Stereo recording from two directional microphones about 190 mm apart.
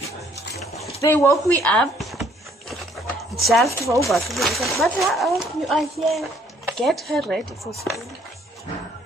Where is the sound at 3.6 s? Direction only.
15° left (ahead or behind).